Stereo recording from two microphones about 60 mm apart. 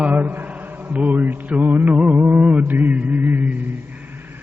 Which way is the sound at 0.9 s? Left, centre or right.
Right.